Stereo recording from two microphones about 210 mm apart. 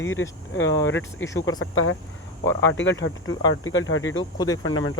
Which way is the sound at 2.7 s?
60° left (ahead or behind).